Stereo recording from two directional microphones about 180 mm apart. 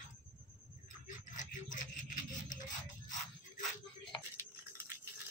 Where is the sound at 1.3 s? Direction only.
45° left (ahead or behind).